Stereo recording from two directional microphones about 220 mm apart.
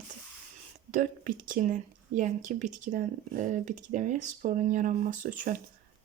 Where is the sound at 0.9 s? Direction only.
40° right (ahead or behind).